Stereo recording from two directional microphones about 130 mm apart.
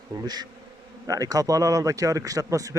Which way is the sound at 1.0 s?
25° right (ahead or behind).